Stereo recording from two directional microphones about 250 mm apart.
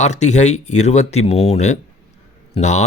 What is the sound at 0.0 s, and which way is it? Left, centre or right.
Speech, left.